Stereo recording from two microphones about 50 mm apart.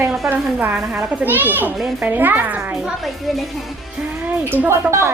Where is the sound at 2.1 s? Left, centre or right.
Right.